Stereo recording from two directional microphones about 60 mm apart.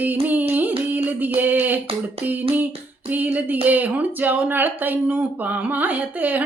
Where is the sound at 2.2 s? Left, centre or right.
Right.